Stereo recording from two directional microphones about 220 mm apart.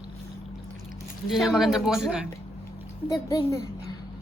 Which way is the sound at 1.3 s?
Centre (ahead or behind).